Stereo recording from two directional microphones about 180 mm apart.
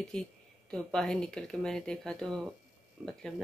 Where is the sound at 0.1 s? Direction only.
5° left (ahead or behind).